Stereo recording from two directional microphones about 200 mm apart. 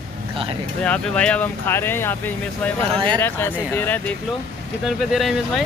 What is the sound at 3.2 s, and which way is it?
Speech, 10° left (ahead or behind).